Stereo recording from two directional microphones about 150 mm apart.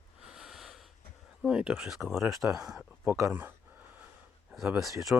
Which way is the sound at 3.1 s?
15° right (ahead or behind).